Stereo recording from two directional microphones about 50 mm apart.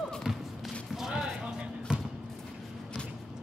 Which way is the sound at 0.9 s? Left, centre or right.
Centre.